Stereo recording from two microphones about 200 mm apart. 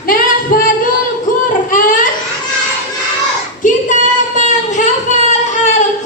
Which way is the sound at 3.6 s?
40° left (ahead or behind).